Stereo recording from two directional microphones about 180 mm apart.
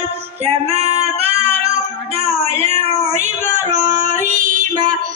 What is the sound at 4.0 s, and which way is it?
Music, 45° right (ahead or behind).